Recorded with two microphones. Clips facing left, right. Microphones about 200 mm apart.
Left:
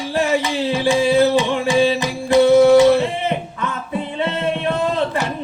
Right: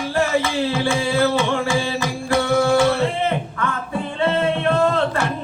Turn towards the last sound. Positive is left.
turn(degrees=15)  # may be behind; listen again after turning